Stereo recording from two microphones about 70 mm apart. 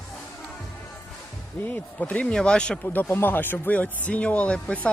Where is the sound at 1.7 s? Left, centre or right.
Left.